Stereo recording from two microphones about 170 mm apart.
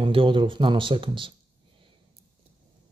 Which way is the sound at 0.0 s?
30° right (ahead or behind).